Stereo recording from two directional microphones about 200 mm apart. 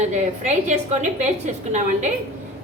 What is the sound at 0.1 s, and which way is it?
A woman's voice, 35° right (ahead or behind).